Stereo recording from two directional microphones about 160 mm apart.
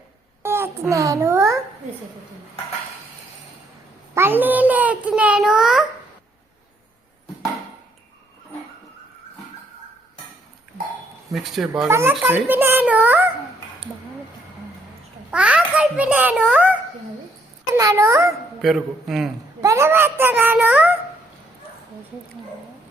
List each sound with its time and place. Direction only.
0.4 s a child's voice: 15° right (ahead or behind)
4.1 s a child's voice: 15° right (ahead or behind)
11.3 s a man's voice: centre (ahead or behind)
11.9 s a child's voice: 15° right (ahead or behind)
15.3 s a child's voice: 5° right (ahead or behind)
17.7 s a child's voice: 20° right (ahead or behind)
18.6 s a man's voice: centre (ahead or behind)
19.6 s a child's voice: 15° right (ahead or behind)